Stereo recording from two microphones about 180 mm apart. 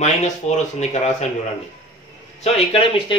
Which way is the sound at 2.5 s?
30° left (ahead or behind).